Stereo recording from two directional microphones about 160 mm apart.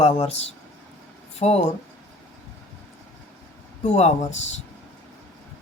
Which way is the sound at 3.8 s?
45° left (ahead or behind).